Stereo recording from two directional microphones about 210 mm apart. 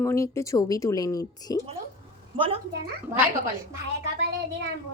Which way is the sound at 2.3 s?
25° right (ahead or behind).